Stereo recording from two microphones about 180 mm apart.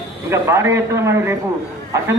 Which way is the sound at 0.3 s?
15° right (ahead or behind).